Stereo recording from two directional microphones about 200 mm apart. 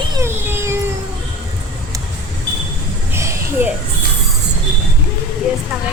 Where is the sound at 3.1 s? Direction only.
10° right (ahead or behind).